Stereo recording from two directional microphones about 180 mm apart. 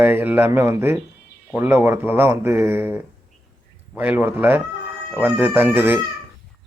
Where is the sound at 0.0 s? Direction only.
10° right (ahead or behind).